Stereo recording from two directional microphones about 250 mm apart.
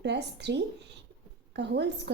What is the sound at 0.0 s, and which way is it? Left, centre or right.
A woman's voice, right.